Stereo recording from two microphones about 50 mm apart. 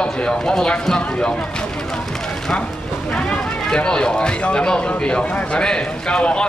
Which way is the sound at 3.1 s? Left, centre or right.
Centre.